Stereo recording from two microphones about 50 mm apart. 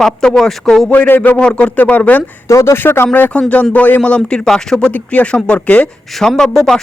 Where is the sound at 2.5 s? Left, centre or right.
Left.